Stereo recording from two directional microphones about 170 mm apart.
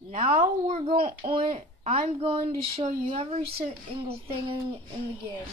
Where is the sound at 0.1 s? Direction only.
50° right (ahead or behind).